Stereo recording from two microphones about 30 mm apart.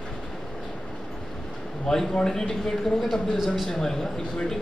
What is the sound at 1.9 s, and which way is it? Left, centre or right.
Speech, centre.